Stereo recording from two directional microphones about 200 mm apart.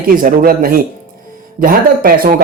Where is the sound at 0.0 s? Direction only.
45° right (ahead or behind).